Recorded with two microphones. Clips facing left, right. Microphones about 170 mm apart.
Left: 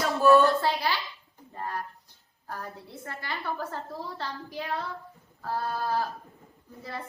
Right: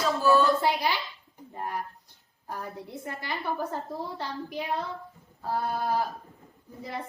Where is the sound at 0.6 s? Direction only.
15° right (ahead or behind).